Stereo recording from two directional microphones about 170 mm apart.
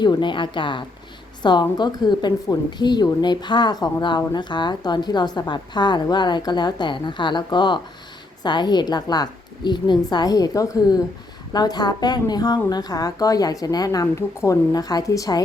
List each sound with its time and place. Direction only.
0.0 s a woman's voice: 25° left (ahead or behind)